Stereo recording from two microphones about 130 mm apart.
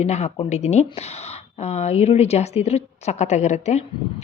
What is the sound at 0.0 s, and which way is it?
A woman's voice, 55° left (ahead or behind).